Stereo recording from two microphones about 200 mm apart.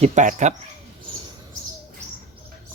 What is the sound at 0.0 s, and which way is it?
Speech, 35° right (ahead or behind).